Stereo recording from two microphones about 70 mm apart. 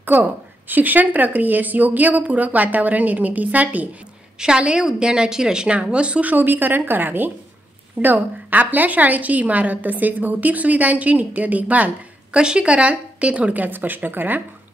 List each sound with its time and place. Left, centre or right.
0.0 s a woman's voice: right
6.3 s a woman's voice: right